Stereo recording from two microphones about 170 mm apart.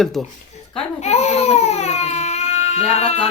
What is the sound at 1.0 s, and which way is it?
Baby cry, 40° left (ahead or behind).